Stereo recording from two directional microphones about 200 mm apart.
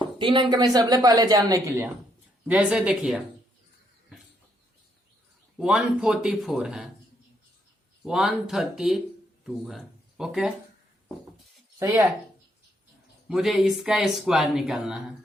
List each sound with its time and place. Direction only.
0.2 s speech: 25° right (ahead or behind)
2.5 s speech: 5° right (ahead or behind)
5.5 s speech: 5° right (ahead or behind)
8.0 s speech: centre (ahead or behind)
11.8 s speech: 15° right (ahead or behind)
13.2 s speech: centre (ahead or behind)